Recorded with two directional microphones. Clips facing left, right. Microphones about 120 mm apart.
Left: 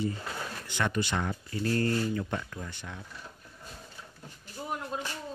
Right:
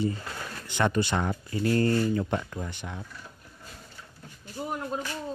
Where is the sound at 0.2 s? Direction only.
5° left (ahead or behind).